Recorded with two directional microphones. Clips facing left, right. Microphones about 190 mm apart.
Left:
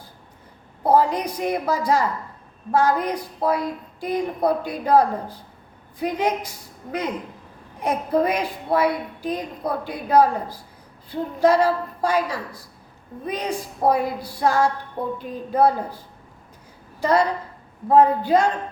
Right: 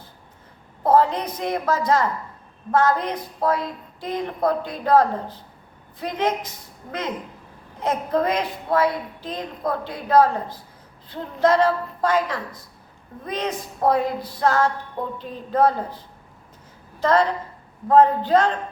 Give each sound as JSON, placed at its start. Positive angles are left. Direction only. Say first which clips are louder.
{"t": 0.9, "sound": "a woman's voice", "louder": "even", "side_deg": 10}
{"t": 7.8, "sound": "a woman's voice", "louder": "left 1 dB", "side_deg": 10}
{"t": 17.0, "sound": "a woman's voice", "louder": "even", "side_deg": 10}